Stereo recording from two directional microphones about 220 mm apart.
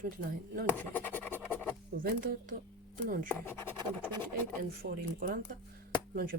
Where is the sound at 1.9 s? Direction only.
40° right (ahead or behind).